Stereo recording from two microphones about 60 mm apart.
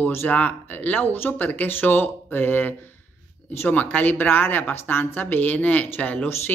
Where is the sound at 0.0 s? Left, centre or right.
Left.